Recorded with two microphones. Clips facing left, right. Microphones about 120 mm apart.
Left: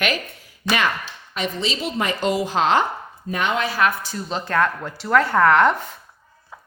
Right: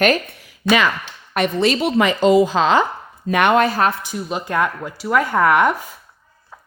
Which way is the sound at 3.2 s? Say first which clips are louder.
Right 8 dB; 80° right.